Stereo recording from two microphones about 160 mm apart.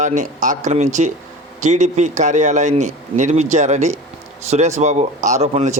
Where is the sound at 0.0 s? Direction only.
50° right (ahead or behind).